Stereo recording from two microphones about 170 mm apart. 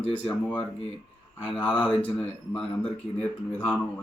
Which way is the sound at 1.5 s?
10° left (ahead or behind).